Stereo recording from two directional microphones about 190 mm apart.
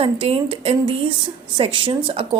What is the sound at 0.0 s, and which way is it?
A woman's voice, 30° right (ahead or behind).